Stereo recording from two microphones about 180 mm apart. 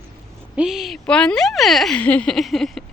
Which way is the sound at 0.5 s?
5° right (ahead or behind).